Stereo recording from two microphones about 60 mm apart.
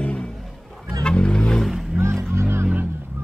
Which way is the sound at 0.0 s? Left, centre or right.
Left.